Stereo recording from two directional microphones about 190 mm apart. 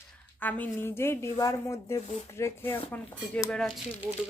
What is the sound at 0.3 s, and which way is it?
Speech, 10° left (ahead or behind).